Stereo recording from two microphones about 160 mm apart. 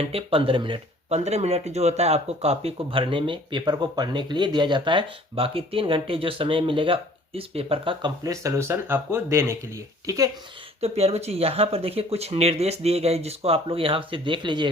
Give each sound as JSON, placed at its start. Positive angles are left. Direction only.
{"t": 0.0, "sound": "speech", "side_deg": -35}
{"t": 10.8, "sound": "speech", "side_deg": -40}